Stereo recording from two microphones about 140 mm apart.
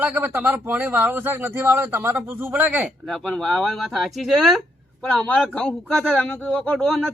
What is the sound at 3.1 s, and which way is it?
A man's voice, 5° left (ahead or behind).